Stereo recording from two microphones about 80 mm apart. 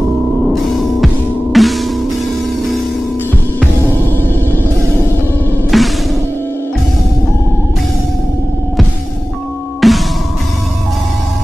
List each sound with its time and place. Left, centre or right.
0.5 s music: centre
3.8 s music: left
5.7 s music: centre
9.8 s music: centre